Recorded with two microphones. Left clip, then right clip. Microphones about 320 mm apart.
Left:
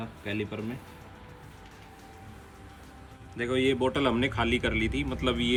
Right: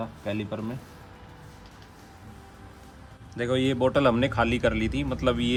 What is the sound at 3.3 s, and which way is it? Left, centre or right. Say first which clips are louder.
Speech: right 1 dB; right.